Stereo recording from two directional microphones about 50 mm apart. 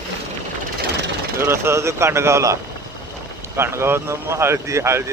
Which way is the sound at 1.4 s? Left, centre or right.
Right.